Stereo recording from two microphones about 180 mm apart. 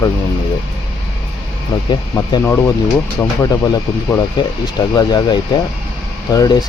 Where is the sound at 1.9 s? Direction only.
25° left (ahead or behind).